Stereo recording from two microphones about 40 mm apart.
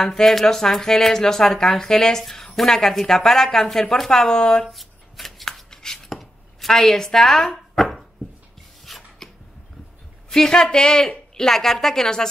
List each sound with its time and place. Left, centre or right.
0.0 s speech: centre
4.6 s shuffling cards: centre
6.0 s chopping: centre
8.8 s filing: centre
10.3 s speech: centre